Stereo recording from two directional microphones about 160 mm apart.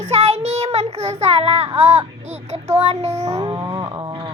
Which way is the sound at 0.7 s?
40° right (ahead or behind).